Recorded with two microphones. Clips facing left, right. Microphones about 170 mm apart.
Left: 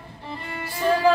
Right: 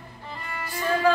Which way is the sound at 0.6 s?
30° left (ahead or behind).